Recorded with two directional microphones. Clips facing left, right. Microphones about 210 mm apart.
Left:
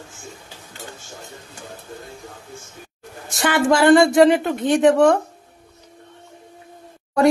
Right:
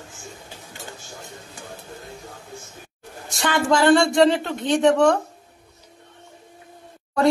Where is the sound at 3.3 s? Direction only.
15° left (ahead or behind).